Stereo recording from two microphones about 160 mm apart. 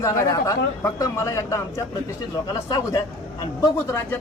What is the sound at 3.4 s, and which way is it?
Speech, 20° left (ahead or behind).